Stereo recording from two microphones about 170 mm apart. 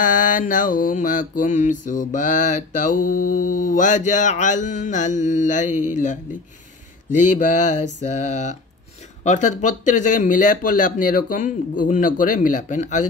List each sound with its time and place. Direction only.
0.0 s mantra: 50° left (ahead or behind)
7.2 s mantra: 45° left (ahead or behind)